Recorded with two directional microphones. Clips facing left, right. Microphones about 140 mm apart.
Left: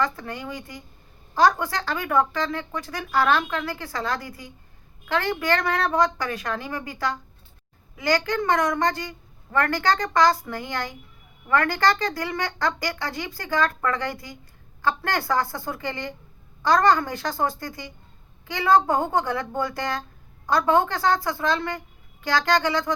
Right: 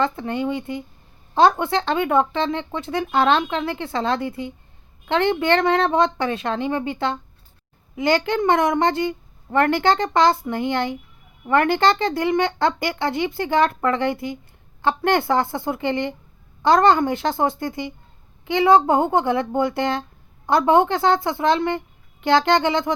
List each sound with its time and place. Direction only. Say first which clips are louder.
0.0 s speech: right 5 dB; 25° right (ahead or behind)